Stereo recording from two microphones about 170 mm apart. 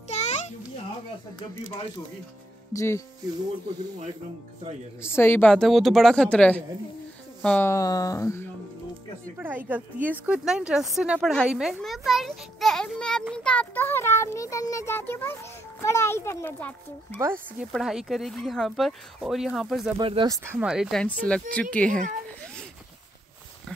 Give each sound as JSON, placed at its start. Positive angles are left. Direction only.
{"t": 0.1, "sound": "a sound", "side_deg": 40}
{"t": 2.7, "sound": "a child's voice", "side_deg": 15}
{"t": 5.0, "sound": "a child's voice", "side_deg": 15}
{"t": 9.4, "sound": "a woman's voice", "side_deg": -10}
{"t": 17.2, "sound": "a woman's voice", "side_deg": -15}
{"t": 17.7, "sound": "a woman's voice", "side_deg": 0}
{"t": 20.0, "sound": "speech", "side_deg": -30}
{"t": 20.5, "sound": "a woman's voice", "side_deg": -5}